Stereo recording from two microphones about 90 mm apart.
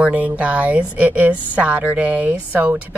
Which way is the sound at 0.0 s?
15° right (ahead or behind).